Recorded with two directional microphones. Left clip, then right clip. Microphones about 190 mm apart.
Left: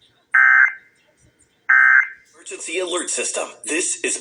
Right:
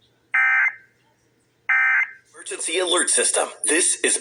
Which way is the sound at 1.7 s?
25° right (ahead or behind).